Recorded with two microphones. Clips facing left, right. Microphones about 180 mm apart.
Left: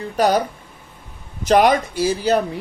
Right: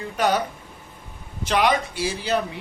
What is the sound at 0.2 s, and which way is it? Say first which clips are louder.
Speech: left 5 dB; 35° left (ahead or behind).